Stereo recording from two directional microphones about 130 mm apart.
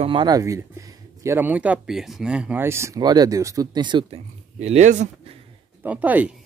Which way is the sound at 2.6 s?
20° right (ahead or behind).